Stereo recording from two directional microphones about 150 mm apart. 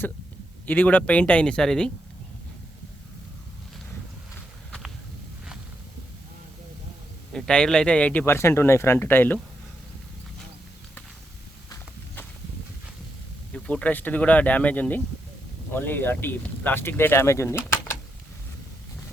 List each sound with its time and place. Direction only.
0.6 s speech: 10° left (ahead or behind)
7.3 s speech: 5° left (ahead or behind)
13.5 s speech: 10° left (ahead or behind)